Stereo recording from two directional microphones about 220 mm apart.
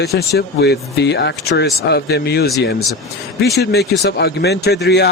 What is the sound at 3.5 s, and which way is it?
Speech, 50° left (ahead or behind).